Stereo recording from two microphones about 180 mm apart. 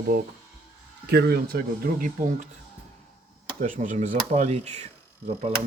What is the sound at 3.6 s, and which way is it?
Speech, 45° right (ahead or behind).